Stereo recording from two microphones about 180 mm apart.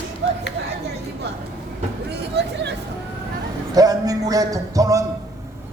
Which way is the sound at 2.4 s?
70° right (ahead or behind).